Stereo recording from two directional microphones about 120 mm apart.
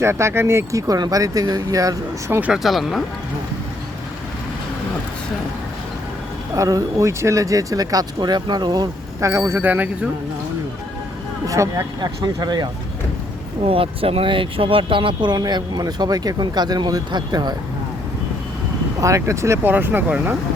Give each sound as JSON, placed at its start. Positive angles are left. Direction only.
{"t": 0.0, "sound": "speech", "side_deg": -20}
{"t": 2.4, "sound": "speech", "side_deg": -5}
{"t": 6.6, "sound": "speech", "side_deg": -30}
{"t": 11.4, "sound": "speech", "side_deg": -25}
{"t": 11.9, "sound": "speech", "side_deg": -35}
{"t": 13.7, "sound": "speech", "side_deg": -50}
{"t": 18.9, "sound": "speech", "side_deg": -25}